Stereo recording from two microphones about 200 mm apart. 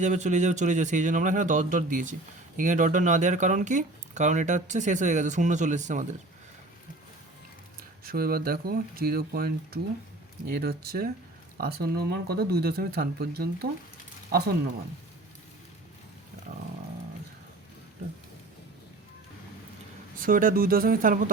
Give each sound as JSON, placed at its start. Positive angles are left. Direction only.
{"t": 0.0, "sound": "speech", "side_deg": -35}
{"t": 8.0, "sound": "speech", "side_deg": -50}
{"t": 20.1, "sound": "speech", "side_deg": -45}